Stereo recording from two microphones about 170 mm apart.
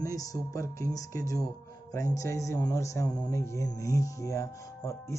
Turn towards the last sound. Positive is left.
turn(degrees=20)  # may be behind; listen again after turning